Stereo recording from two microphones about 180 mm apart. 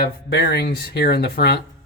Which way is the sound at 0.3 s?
65° left (ahead or behind).